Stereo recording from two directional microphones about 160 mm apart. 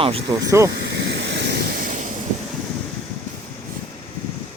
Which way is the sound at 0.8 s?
90° right.